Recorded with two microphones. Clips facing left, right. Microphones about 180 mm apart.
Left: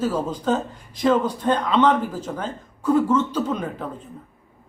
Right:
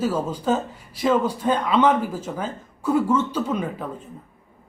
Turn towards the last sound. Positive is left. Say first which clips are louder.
# even
turn(degrees=-5)  # may be behind; listen again after turning